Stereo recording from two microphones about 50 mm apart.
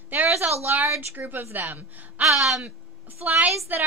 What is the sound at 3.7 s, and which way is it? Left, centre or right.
Speech, right.